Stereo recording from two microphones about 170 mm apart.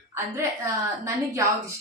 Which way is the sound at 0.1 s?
15° right (ahead or behind).